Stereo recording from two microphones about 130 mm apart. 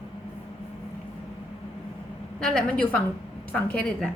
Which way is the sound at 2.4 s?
5° left (ahead or behind).